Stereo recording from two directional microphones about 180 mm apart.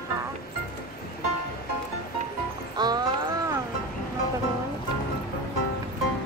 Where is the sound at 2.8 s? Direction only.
20° right (ahead or behind).